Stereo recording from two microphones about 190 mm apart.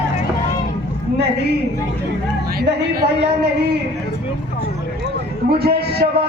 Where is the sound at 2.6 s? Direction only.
55° right (ahead or behind).